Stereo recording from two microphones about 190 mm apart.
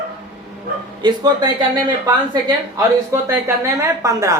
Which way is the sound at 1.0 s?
20° right (ahead or behind).